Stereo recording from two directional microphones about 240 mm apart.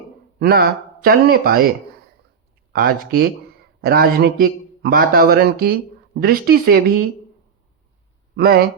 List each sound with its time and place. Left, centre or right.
0.3 s speech: right
2.7 s speech: right
8.4 s speech: right